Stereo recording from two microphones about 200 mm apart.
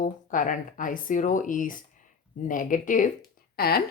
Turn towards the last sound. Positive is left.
turn(degrees=50)  # may be behind; listen again after turning